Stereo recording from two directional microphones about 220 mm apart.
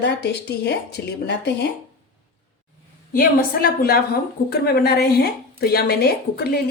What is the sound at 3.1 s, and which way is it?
A woman's voice, 40° left (ahead or behind).